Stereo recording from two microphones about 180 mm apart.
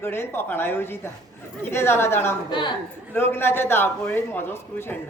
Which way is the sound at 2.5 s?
25° left (ahead or behind).